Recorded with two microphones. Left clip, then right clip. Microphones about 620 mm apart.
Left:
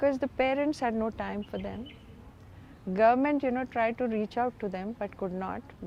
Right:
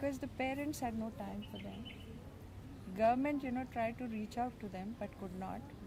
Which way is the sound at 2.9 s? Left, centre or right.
Left.